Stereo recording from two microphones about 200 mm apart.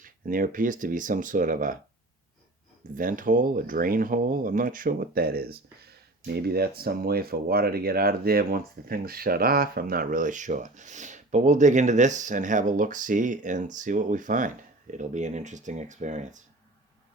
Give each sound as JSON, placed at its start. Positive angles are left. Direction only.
{"t": 0.0, "sound": "speech", "side_deg": -45}
{"t": 2.9, "sound": "speech", "side_deg": -45}